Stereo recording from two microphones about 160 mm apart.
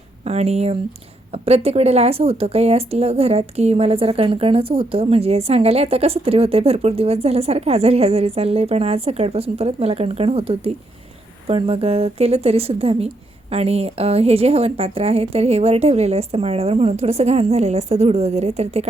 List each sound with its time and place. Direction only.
0.3 s a woman's voice: 40° right (ahead or behind)